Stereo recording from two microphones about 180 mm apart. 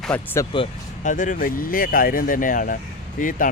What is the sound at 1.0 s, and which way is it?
Speech, 45° left (ahead or behind).